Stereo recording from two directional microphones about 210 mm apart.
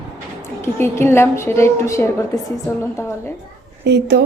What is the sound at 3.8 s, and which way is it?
Speech, 55° right (ahead or behind).